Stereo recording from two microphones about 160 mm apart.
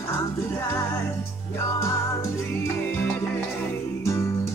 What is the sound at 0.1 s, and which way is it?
Music, 15° left (ahead or behind).